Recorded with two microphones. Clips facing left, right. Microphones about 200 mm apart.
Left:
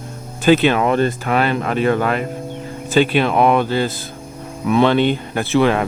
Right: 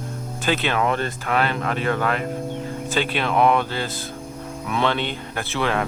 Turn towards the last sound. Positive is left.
turn(degrees=15)  # may be behind; listen again after turning